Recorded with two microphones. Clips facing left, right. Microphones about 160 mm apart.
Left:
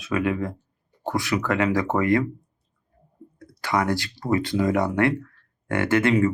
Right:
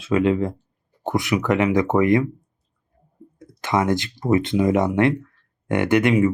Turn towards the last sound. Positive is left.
turn(degrees=-15)  # may be behind; listen again after turning